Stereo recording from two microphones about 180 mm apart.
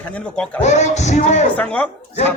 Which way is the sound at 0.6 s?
40° left (ahead or behind).